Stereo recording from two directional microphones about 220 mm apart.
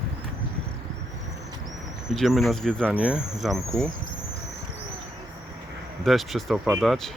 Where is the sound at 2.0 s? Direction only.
Centre (ahead or behind).